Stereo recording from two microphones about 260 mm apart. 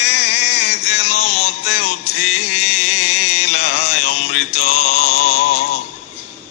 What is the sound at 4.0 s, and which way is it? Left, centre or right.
Mantra, left.